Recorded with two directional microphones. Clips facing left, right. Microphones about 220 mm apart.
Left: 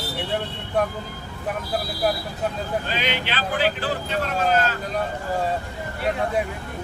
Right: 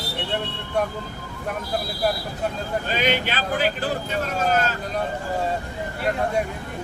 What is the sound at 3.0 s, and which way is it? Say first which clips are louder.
Speech: right 3 dB; 45° right (ahead or behind).